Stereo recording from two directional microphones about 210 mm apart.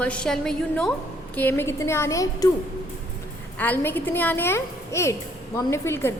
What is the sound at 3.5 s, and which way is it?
A woman's voice, 10° left (ahead or behind).